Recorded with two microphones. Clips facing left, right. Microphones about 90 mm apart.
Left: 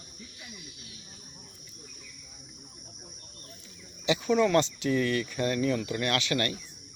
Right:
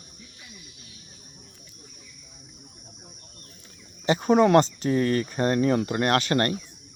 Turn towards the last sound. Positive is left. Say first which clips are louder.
# right 6 dB
turn(degrees=-40)  # may be behind; listen again after turning